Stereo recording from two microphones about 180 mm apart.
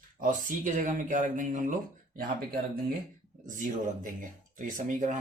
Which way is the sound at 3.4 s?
45° right (ahead or behind).